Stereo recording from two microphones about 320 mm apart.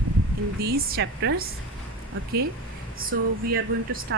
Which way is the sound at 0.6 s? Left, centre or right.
Right.